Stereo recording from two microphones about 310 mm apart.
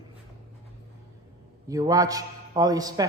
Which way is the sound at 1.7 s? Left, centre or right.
Centre.